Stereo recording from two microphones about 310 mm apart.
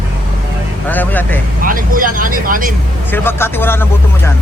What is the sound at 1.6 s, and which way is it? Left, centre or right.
Speech, right.